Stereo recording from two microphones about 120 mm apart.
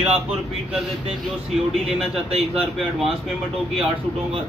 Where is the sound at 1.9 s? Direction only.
Centre (ahead or behind).